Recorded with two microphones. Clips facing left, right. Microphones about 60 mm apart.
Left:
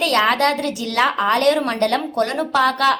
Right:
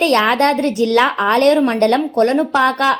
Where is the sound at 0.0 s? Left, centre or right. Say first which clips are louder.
Right 3 dB; right.